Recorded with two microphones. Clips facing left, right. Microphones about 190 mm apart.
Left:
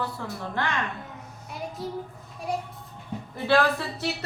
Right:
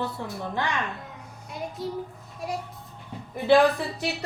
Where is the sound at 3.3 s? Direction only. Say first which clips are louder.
Right 4 dB; 15° right (ahead or behind).